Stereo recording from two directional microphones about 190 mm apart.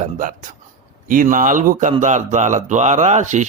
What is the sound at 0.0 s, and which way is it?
Speech, 40° right (ahead or behind).